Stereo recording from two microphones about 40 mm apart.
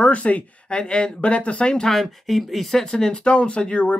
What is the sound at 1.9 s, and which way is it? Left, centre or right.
Speech, centre.